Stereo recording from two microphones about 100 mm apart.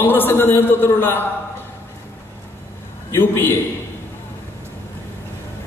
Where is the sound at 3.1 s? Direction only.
20° left (ahead or behind).